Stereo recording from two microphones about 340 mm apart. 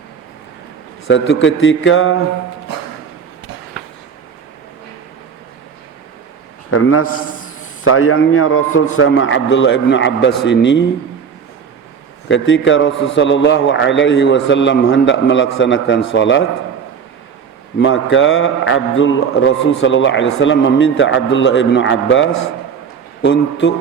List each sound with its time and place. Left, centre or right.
1.0 s a man's voice: left
6.7 s a man's voice: left
12.3 s a man's voice: left
17.7 s a man's voice: left